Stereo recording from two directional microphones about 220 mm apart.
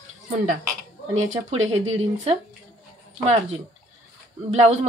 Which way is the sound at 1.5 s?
30° right (ahead or behind).